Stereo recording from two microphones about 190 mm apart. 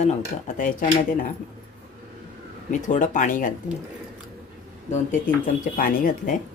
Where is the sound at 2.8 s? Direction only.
40° left (ahead or behind).